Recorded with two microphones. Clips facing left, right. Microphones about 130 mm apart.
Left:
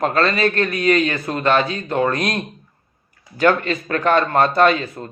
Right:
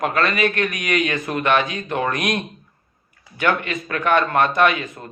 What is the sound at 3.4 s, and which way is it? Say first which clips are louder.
A man's voice: left 4 dB; 35° left (ahead or behind).